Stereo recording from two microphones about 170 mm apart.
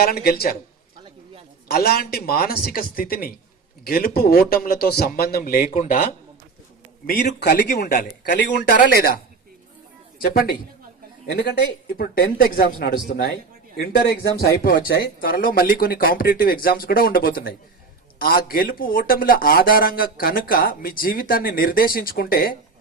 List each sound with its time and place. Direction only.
0.0 s speech: 65° left (ahead or behind)
1.6 s speech: 65° left (ahead or behind)
7.1 s speech: 55° left (ahead or behind)
7.3 s speech: 75° left (ahead or behind)
10.2 s speech: 60° left (ahead or behind)